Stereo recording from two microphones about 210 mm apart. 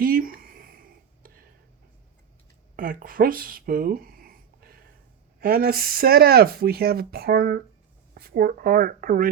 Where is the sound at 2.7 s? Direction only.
45° right (ahead or behind).